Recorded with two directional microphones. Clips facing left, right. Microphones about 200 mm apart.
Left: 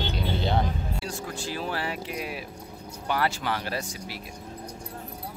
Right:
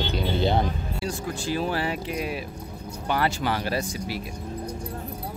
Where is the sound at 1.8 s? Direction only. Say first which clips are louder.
Right 4 dB; 5° left (ahead or behind).